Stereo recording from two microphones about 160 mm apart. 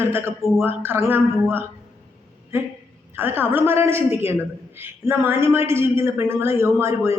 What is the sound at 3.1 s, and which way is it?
A man's voice, 15° right (ahead or behind).